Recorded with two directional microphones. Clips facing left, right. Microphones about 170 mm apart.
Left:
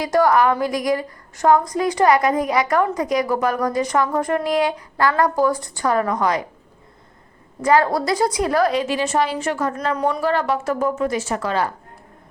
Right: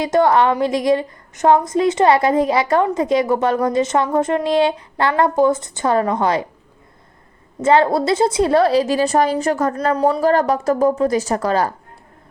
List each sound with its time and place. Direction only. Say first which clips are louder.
0.0 s a woman's voice: right 2 dB; 25° right (ahead or behind)
7.6 s a woman's voice: right 3 dB; 25° right (ahead or behind)